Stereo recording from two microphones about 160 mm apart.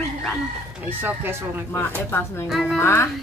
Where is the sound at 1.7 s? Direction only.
10° left (ahead or behind).